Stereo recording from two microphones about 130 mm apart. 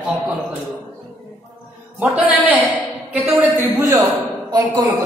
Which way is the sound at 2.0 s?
10° right (ahead or behind).